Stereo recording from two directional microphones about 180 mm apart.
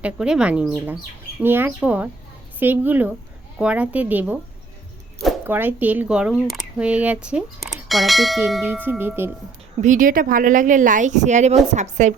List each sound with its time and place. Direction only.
0.0 s a woman's voice: 5° right (ahead or behind)
5.5 s a woman's voice: 10° right (ahead or behind)
9.8 s a woman's voice: 45° right (ahead or behind)